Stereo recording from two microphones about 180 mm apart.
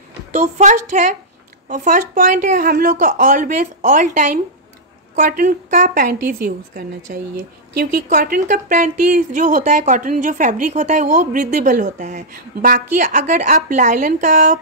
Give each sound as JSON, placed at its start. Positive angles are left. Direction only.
{"t": 0.3, "sound": "a woman's voice", "side_deg": -40}